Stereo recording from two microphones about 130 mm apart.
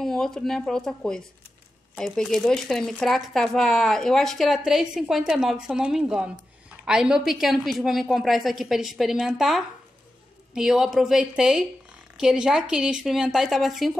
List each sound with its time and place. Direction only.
0.0 s speech: 5° left (ahead or behind)